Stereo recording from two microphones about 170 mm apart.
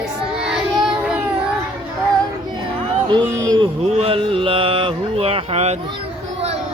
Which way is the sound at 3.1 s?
25° right (ahead or behind).